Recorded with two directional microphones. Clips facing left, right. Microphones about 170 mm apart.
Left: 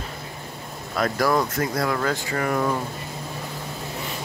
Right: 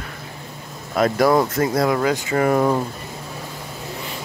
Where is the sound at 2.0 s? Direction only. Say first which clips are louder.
Right 5 dB; 10° right (ahead or behind).